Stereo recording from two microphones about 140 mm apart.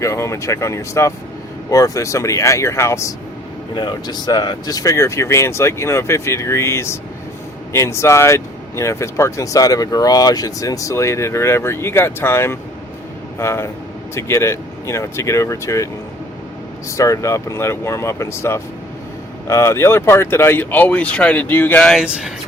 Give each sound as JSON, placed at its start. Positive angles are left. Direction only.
{"t": 0.0, "sound": "speech", "side_deg": 20}
{"t": 3.8, "sound": "speech", "side_deg": 30}
{"t": 17.0, "sound": "speech", "side_deg": 20}